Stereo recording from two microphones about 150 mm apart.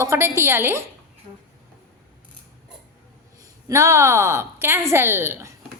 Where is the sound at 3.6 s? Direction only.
20° right (ahead or behind).